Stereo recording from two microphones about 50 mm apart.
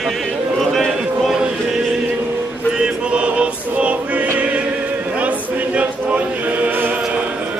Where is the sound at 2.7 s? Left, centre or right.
Centre.